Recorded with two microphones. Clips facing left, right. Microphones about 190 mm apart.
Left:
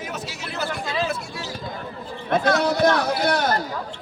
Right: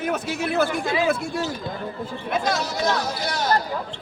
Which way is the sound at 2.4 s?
60° left (ahead or behind).